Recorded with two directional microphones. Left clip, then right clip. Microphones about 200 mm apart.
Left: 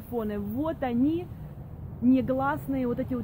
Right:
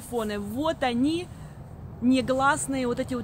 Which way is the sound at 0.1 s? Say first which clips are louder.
Right 2 dB; 10° right (ahead or behind).